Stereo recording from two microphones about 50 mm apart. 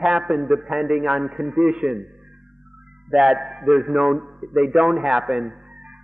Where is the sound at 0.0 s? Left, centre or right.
Centre.